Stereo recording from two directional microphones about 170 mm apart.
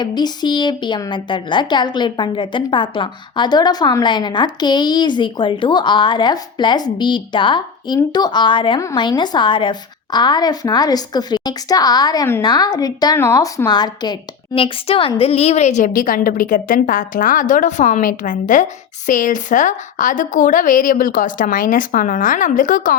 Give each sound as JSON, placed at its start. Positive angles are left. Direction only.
{"t": 0.0, "sound": "a woman's voice", "side_deg": 25}